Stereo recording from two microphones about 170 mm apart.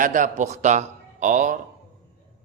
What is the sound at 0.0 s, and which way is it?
A man's voice, 50° right (ahead or behind).